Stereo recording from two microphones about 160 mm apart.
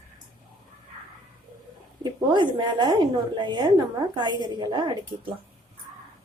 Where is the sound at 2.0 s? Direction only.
30° right (ahead or behind).